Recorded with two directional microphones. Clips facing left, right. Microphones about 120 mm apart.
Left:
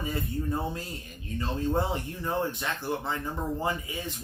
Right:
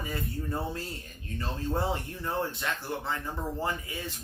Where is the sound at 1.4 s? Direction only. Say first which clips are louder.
Left 3 dB; 20° left (ahead or behind).